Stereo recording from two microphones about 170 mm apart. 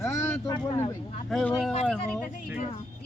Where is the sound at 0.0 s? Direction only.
15° left (ahead or behind).